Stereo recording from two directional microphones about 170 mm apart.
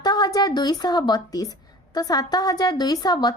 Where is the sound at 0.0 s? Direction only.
25° left (ahead or behind).